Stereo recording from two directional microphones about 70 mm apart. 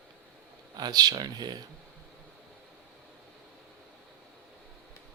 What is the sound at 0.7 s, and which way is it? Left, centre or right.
Speech, right.